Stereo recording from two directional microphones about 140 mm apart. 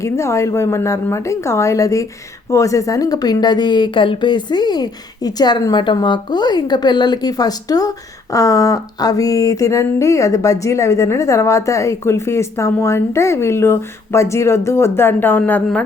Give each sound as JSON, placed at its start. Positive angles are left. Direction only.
{"t": 0.0, "sound": "a woman's voice", "side_deg": 20}